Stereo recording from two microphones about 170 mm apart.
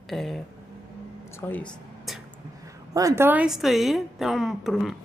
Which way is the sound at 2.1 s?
Centre (ahead or behind).